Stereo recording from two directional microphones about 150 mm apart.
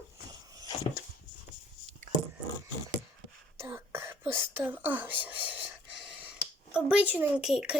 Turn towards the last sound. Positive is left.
turn(degrees=-5)  # may be behind; listen again after turning